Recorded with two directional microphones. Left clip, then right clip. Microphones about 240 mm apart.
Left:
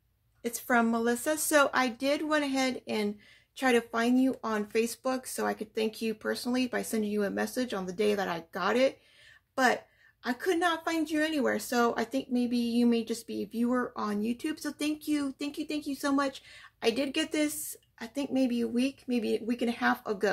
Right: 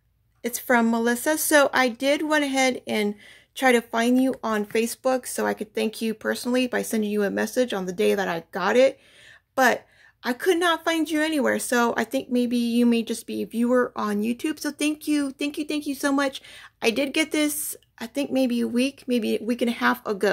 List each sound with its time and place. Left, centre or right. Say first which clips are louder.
0.4 s a woman's voice: right 6 dB; right